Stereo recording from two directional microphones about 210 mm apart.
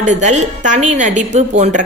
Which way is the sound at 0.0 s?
35° right (ahead or behind).